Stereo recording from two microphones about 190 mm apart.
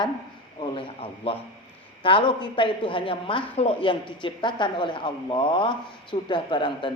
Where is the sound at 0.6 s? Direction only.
30° left (ahead or behind).